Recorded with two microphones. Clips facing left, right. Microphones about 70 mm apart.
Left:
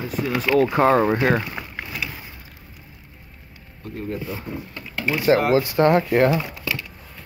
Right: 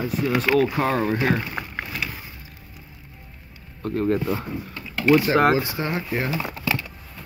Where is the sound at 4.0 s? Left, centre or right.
Right.